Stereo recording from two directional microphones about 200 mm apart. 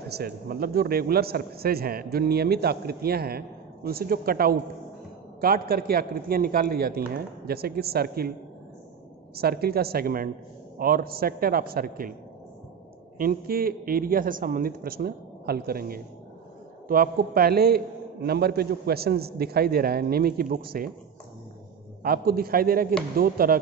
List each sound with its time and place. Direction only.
0.1 s a man's voice: 50° right (ahead or behind)
9.3 s a man's voice: 50° right (ahead or behind)
13.2 s a man's voice: 50° right (ahead or behind)
22.0 s a man's voice: 50° right (ahead or behind)